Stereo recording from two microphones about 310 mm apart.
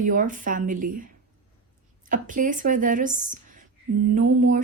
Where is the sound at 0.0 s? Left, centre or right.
Right.